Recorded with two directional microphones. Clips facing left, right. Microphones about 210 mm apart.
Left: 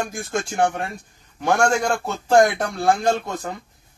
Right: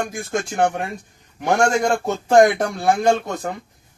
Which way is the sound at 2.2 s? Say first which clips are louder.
Right 2 dB; 20° right (ahead or behind).